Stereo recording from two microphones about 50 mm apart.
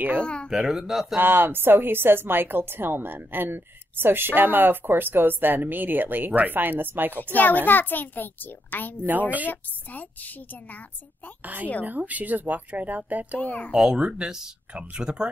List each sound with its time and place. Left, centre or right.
0.2 s a child's voice: left
0.7 s speech: centre
1.1 s a woman's voice: right
7.3 s a child's voice: left
11.4 s speech: right
13.4 s a child's voice: left
13.7 s a child's voice: centre